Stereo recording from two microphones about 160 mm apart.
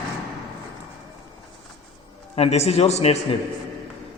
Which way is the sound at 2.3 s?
40° left (ahead or behind).